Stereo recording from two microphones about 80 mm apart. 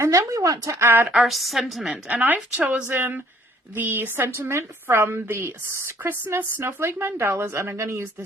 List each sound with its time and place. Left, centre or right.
0.0 s speech: right
0.8 s speech: right
1.1 s a woman's voice: centre; by 8.0 s right